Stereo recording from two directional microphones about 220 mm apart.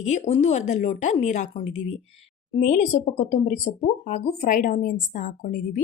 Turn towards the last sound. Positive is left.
turn(degrees=40)  # may be behind; listen again after turning